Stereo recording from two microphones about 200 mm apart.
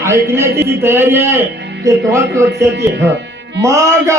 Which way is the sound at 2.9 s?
60° right (ahead or behind).